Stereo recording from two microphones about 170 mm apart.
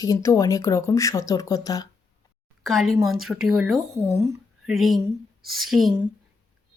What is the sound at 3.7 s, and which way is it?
Speech, 20° right (ahead or behind).